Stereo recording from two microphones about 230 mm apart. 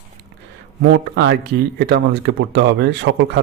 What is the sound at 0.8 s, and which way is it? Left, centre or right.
Speech, right.